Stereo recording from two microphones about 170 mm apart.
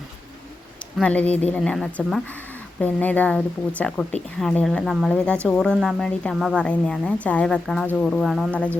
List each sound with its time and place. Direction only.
0.9 s a woman's voice: 5° left (ahead or behind)